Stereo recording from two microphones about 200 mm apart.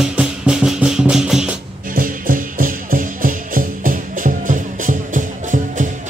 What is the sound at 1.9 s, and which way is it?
Music, 45° right (ahead or behind).